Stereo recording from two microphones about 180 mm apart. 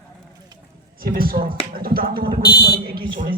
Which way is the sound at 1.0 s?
55° right (ahead or behind).